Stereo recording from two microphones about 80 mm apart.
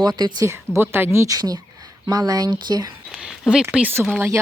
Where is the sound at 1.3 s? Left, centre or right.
Right.